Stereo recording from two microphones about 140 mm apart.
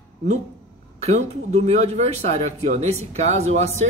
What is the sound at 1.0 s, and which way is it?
Speech, 50° right (ahead or behind).